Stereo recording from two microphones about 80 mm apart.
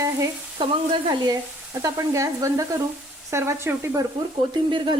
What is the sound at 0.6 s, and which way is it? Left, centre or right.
Speech, right.